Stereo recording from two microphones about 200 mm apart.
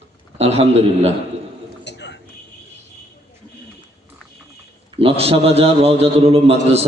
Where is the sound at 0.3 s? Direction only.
30° right (ahead or behind).